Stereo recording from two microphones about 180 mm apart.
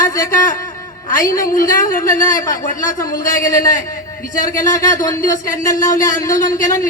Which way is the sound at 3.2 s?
50° left (ahead or behind).